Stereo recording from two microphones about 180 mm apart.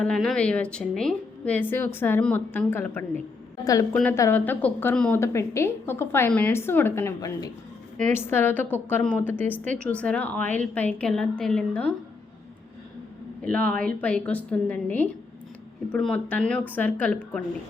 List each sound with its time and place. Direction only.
0.0 s a woman's voice: 5° left (ahead or behind)
13.4 s a woman's voice: 5° left (ahead or behind)